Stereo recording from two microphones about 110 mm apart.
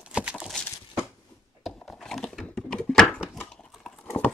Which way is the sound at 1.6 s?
5° left (ahead or behind).